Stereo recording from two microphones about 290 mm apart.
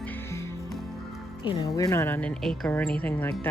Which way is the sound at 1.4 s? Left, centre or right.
Centre.